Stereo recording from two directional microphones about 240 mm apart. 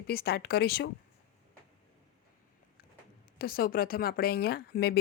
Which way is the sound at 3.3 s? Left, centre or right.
Left.